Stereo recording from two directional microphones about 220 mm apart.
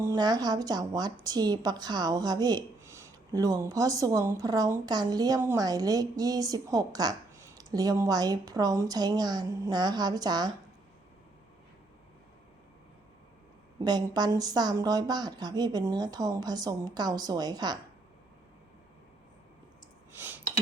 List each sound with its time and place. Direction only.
0.0 s speech: 15° right (ahead or behind)
13.8 s speech: 20° right (ahead or behind)
20.1 s a sound: 10° right (ahead or behind)